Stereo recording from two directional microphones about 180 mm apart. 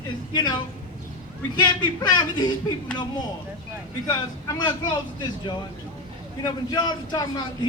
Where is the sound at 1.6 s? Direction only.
25° left (ahead or behind).